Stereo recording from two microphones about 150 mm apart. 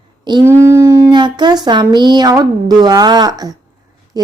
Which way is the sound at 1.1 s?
30° right (ahead or behind).